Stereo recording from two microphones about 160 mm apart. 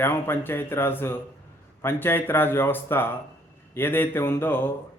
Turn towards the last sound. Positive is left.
turn(degrees=15)  # may be behind; listen again after turning